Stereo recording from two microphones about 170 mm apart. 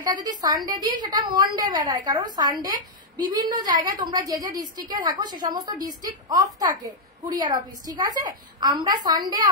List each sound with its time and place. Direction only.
0.0 s a woman's voice: 25° right (ahead or behind)